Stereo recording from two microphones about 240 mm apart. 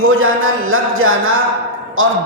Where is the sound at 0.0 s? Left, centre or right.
Right.